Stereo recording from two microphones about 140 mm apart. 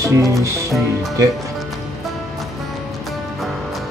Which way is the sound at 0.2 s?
20° right (ahead or behind).